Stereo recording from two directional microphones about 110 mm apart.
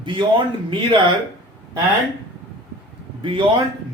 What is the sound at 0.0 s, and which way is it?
Speech, 50° right (ahead or behind).